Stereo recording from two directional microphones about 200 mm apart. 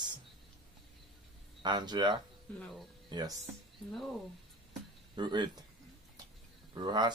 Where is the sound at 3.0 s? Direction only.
20° right (ahead or behind).